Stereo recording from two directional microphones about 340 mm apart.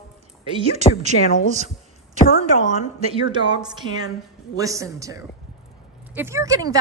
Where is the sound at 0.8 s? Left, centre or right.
Centre.